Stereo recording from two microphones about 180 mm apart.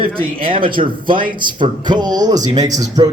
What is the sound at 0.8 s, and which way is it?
Speech, 35° right (ahead or behind).